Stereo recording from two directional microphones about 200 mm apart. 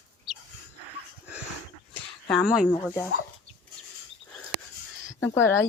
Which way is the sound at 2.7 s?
10° left (ahead or behind).